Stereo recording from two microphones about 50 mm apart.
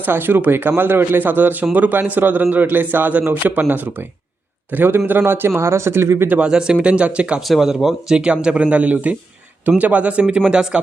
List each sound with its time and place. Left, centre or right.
0.0 s a man's voice: right
6.4 s speech: centre
7.4 s speech: centre
8.2 s speech: centre